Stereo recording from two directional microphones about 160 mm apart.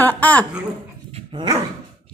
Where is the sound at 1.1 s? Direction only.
30° right (ahead or behind).